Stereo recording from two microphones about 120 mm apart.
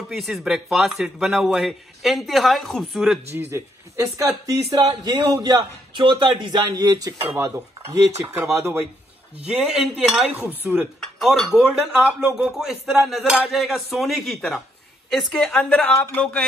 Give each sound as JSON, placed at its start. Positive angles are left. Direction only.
{"t": 0.1, "sound": "a man's voice", "side_deg": 0}
{"t": 3.3, "sound": "a man's voice", "side_deg": -20}
{"t": 7.3, "sound": "cutlery", "side_deg": -25}
{"t": 9.4, "sound": "speech", "side_deg": -5}
{"t": 11.0, "sound": "a man's voice", "side_deg": 0}